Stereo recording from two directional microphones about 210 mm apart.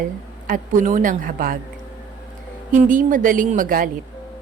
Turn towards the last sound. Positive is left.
turn(degrees=-40)  # may be behind; listen again after turning